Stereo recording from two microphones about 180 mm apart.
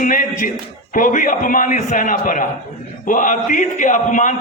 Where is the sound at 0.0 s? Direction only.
50° left (ahead or behind).